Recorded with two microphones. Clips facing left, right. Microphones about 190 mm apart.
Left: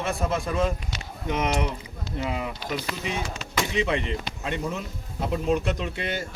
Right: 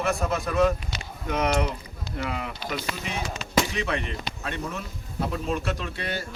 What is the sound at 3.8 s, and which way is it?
Speech, 20° left (ahead or behind).